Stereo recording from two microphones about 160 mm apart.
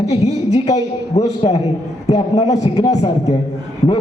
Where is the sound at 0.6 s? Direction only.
25° left (ahead or behind).